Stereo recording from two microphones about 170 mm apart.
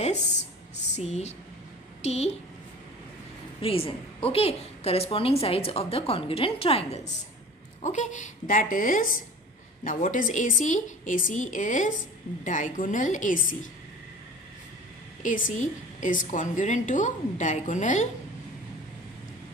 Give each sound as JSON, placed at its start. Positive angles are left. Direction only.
{"t": 0.9, "sound": "a woman's voice", "side_deg": 40}
{"t": 3.6, "sound": "a woman's voice", "side_deg": 35}
{"t": 15.2, "sound": "a woman's voice", "side_deg": 50}